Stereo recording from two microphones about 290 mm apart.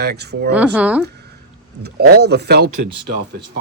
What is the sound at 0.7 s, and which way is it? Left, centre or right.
Speech, centre.